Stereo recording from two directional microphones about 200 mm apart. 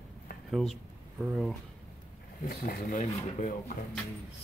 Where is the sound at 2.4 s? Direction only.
40° left (ahead or behind).